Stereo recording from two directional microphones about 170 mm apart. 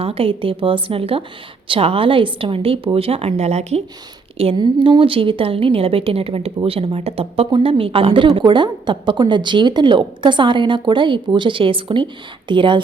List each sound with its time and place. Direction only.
0.0 s a woman's voice: 35° right (ahead or behind)
4.4 s a woman's voice: 30° right (ahead or behind)